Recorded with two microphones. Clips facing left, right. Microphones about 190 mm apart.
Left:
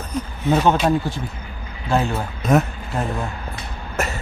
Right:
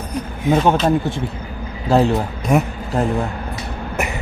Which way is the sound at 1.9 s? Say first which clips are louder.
Right 6 dB; 35° right (ahead or behind).